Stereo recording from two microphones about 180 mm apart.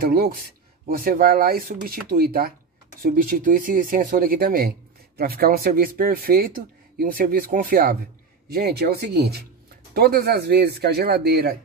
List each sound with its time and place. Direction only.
0.0 s speech: 55° right (ahead or behind)